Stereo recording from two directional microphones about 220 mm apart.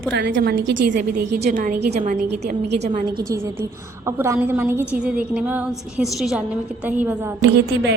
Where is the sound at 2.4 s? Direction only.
50° right (ahead or behind).